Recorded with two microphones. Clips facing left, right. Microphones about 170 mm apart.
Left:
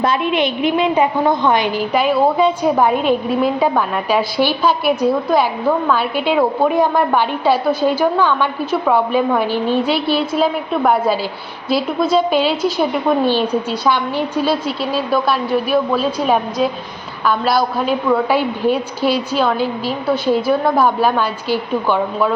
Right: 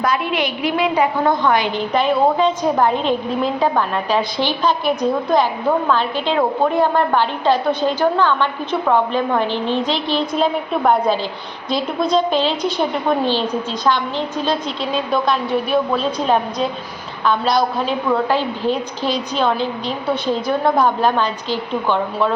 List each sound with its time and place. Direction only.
0.0 s a woman's voice: 25° left (ahead or behind)
1.7 s a woman's voice: 5° left (ahead or behind)